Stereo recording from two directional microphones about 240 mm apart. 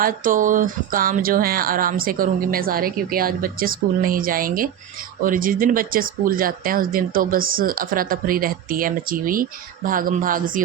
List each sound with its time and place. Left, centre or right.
0.0 s speech: right